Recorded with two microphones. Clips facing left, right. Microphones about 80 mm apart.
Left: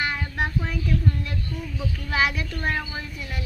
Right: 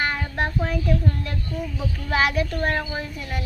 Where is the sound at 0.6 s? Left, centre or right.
Right.